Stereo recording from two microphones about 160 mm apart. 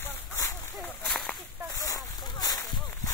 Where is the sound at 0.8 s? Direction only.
5° left (ahead or behind).